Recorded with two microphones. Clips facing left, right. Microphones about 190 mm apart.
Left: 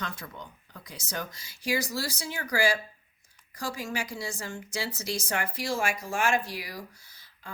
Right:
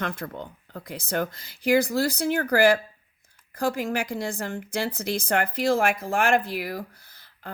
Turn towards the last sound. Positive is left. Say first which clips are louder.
# right 6 dB
turn(degrees=-55)  # may be behind; listen again after turning